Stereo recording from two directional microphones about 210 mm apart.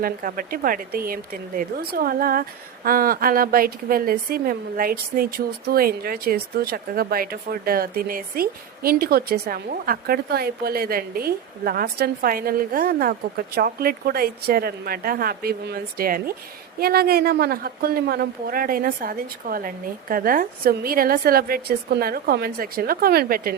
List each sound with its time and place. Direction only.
0.0 s speech: 40° right (ahead or behind)